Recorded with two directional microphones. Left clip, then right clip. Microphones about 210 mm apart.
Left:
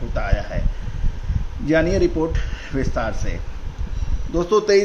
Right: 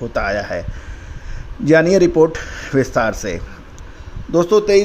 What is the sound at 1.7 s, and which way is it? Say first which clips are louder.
A man's voice: right 7 dB; 50° right (ahead or behind).